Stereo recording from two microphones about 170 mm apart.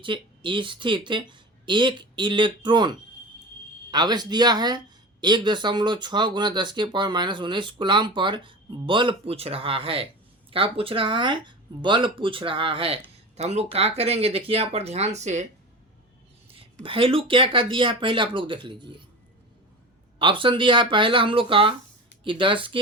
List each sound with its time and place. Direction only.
0.0 s speech: 30° right (ahead or behind)
3.9 s speech: 25° right (ahead or behind); by 15.4 s 40° right (ahead or behind)
16.8 s speech: 30° right (ahead or behind)
20.1 s speech: 30° right (ahead or behind)